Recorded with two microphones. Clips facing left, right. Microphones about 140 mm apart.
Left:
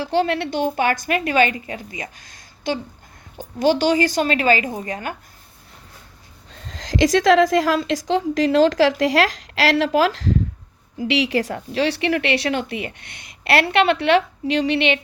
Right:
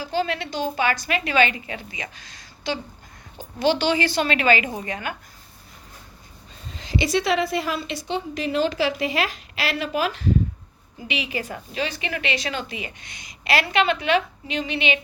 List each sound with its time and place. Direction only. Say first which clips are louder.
0.0 s a woman's voice: left 5 dB; 65° left (ahead or behind); by 5.1 s 40° left (ahead or behind)
6.5 s a woman's voice: left 1 dB; 90° left; by 15.0 s 65° left (ahead or behind)